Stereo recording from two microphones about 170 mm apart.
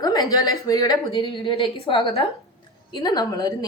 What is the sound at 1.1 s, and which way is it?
A woman's voice, 30° left (ahead or behind).